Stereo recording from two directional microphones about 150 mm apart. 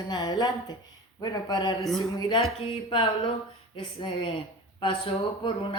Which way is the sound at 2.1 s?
25° left (ahead or behind).